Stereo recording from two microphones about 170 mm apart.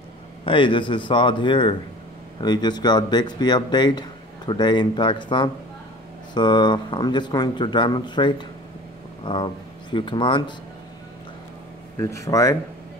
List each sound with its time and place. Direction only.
0.5 s speech: 30° left (ahead or behind)
12.0 s speech: 20° left (ahead or behind)